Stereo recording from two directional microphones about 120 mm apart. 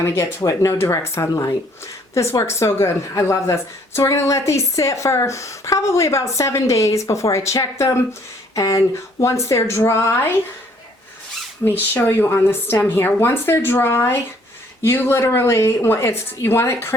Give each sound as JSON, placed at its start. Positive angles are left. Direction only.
{"t": 0.0, "sound": "a woman's voice", "side_deg": 25}
{"t": 11.6, "sound": "a woman's voice", "side_deg": 15}